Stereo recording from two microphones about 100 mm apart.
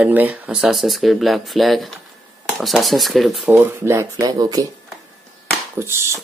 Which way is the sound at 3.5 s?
20° right (ahead or behind).